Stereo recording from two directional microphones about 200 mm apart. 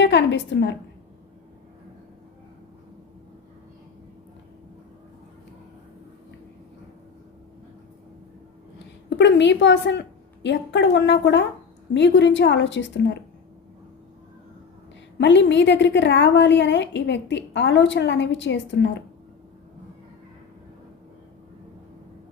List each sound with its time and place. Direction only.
0.0 s a woman's voice: 60° left (ahead or behind)
9.0 s a woman's voice: 60° left (ahead or behind)
15.2 s a woman's voice: 60° left (ahead or behind)